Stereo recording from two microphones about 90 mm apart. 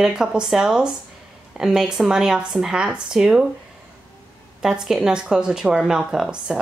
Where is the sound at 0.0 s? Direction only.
10° right (ahead or behind).